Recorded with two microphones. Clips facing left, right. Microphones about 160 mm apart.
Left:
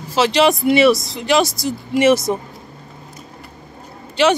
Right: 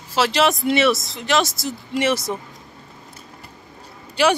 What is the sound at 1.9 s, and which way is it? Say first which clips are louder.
Speech: left 7 dB; 15° left (ahead or behind).